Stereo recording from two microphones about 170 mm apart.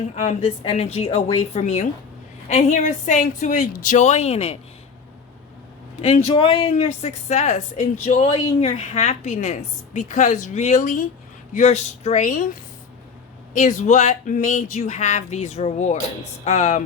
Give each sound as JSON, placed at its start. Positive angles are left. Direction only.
{"t": 0.2, "sound": "a woman's voice", "side_deg": 35}
{"t": 6.0, "sound": "a woman's voice", "side_deg": 35}
{"t": 11.5, "sound": "a woman's voice", "side_deg": 40}
{"t": 13.5, "sound": "a woman's voice", "side_deg": 45}